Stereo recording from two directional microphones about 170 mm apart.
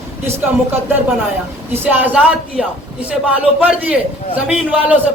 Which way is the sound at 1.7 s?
10° right (ahead or behind).